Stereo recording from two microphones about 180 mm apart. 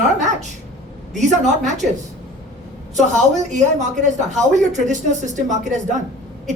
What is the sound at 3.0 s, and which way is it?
Speech, 40° right (ahead or behind).